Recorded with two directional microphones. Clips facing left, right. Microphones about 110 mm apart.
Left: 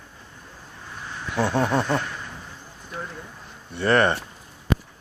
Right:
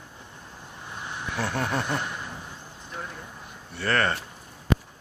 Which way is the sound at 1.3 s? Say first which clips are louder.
Left 7 dB; 20° left (ahead or behind).